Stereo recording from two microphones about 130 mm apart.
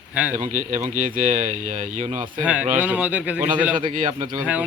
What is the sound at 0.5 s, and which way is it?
Speech, 80° right.